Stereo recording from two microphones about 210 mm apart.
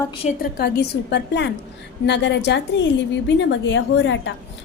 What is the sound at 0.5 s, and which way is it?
A woman's voice, 50° left (ahead or behind).